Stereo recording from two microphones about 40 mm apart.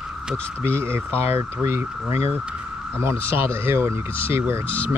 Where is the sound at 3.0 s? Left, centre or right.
Right.